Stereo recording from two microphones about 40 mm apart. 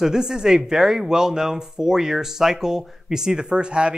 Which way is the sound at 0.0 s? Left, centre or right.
Centre.